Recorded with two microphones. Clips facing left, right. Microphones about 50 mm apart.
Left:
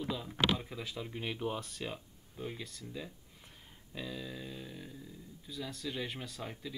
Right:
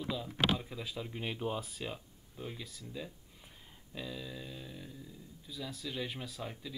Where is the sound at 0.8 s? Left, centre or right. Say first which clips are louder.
Even; centre.